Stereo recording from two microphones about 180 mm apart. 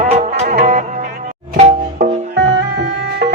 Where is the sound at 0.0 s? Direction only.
35° right (ahead or behind).